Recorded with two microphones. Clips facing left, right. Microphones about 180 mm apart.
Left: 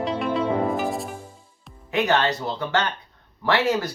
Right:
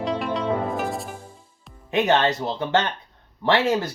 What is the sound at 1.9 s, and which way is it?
Speech, 25° right (ahead or behind).